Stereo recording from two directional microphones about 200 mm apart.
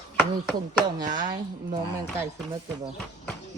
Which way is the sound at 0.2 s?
5° right (ahead or behind).